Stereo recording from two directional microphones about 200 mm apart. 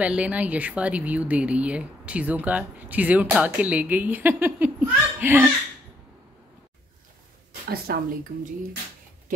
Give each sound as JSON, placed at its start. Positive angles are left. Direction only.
{"t": 0.0, "sound": "speech", "side_deg": -5}
{"t": 7.7, "sound": "speech", "side_deg": -50}